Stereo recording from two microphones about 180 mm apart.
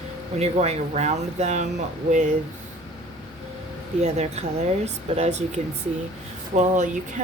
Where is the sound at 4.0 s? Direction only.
35° right (ahead or behind).